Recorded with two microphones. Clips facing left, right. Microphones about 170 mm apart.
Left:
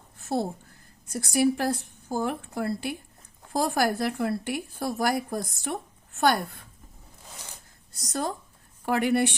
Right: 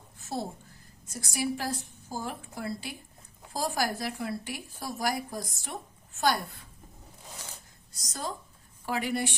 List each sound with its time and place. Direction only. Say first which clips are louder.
1.0 s speech: left 9 dB; 60° left (ahead or behind)
7.9 s speech: left 7 dB; 60° left (ahead or behind)